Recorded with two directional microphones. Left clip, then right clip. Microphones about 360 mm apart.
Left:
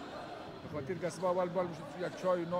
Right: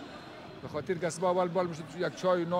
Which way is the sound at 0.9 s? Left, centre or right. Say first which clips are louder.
Right 5 dB; right.